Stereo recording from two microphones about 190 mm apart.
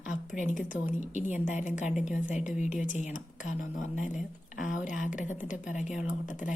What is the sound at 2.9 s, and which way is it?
Speech, 40° left (ahead or behind).